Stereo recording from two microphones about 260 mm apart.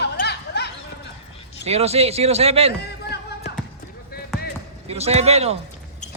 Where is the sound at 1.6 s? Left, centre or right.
Right.